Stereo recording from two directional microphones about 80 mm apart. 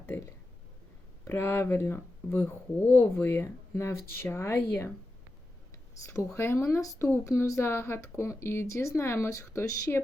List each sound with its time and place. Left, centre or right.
1.3 s speech: left
6.3 s speech: left